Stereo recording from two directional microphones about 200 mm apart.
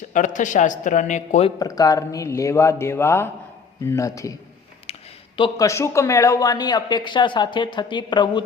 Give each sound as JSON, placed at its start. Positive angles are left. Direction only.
{"t": 0.1, "sound": "a man's voice", "side_deg": 40}
{"t": 1.5, "sound": "speech", "side_deg": 20}
{"t": 4.9, "sound": "a sound", "side_deg": 30}
{"t": 5.4, "sound": "speech", "side_deg": 15}